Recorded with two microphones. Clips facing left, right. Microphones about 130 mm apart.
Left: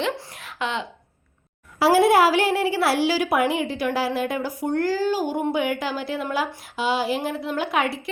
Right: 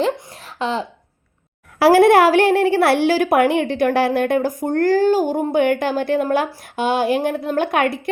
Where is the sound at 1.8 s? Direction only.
60° right (ahead or behind).